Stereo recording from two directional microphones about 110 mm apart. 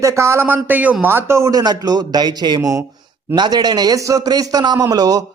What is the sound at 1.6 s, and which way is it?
Speech, 35° right (ahead or behind).